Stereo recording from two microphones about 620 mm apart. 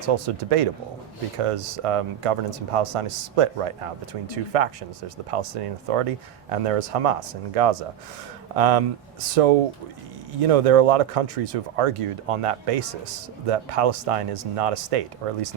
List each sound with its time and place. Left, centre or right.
0.0 s speech: right